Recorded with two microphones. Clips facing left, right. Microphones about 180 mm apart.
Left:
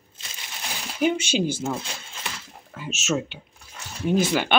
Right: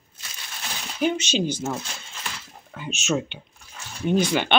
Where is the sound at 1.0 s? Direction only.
10° left (ahead or behind).